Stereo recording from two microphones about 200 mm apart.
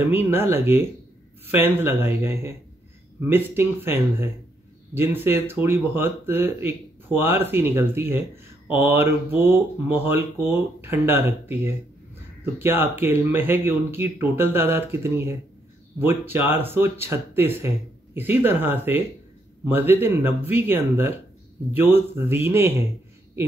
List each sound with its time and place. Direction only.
0.1 s speech: 10° right (ahead or behind)